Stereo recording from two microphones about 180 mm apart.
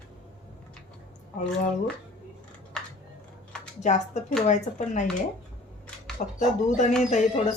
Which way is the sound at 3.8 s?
40° left (ahead or behind).